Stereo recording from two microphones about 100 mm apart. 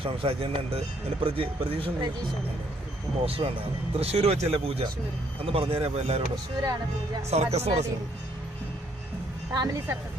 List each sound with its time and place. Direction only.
0.0 s speech: 65° right (ahead or behind)
3.2 s speech: 70° right (ahead or behind)
3.9 s speech: 90° right
7.3 s speech: 90° right
9.5 s speech: 45° right (ahead or behind)